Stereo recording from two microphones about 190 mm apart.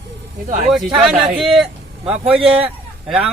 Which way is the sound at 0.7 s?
Centre (ahead or behind).